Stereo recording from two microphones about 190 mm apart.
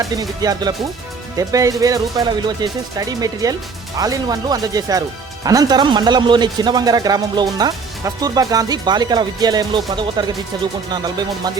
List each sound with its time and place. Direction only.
0.0 s speech: 20° right (ahead or behind)